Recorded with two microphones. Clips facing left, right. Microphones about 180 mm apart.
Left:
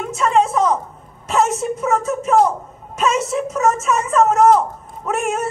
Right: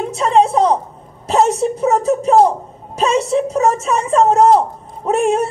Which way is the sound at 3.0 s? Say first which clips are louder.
Right 4 dB; 35° right (ahead or behind).